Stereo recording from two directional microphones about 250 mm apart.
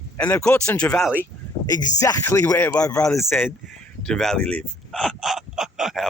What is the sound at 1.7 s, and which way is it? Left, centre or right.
Speech, centre.